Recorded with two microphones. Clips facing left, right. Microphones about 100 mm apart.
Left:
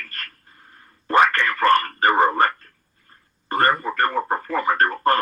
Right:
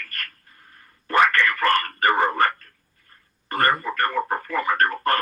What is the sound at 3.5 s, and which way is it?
Speech, 25° left (ahead or behind).